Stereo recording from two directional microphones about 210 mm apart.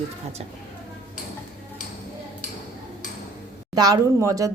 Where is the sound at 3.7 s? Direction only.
20° right (ahead or behind).